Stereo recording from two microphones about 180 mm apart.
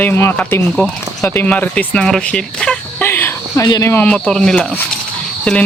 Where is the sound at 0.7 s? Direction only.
5° left (ahead or behind).